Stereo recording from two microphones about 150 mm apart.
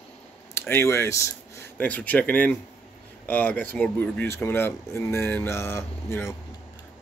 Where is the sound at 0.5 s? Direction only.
15° left (ahead or behind).